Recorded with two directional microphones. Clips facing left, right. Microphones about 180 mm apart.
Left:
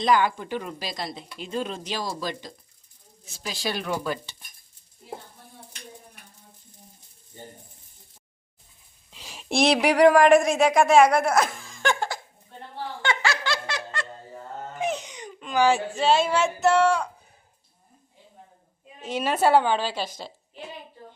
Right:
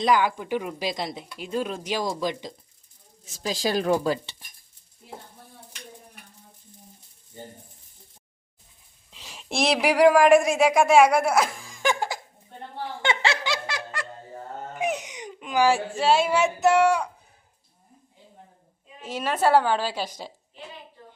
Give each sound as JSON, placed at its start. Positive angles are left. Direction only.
{"t": 0.0, "sound": "speech", "side_deg": -10}
{"t": 3.4, "sound": "speech", "side_deg": -40}
{"t": 9.0, "sound": "speech", "side_deg": 0}
{"t": 12.7, "sound": "snicker", "side_deg": -25}
{"t": 14.8, "sound": "speech", "side_deg": -15}
{"t": 19.4, "sound": "speech", "side_deg": 0}